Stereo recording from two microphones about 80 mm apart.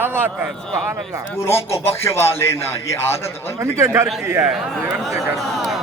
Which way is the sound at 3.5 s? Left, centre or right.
Right.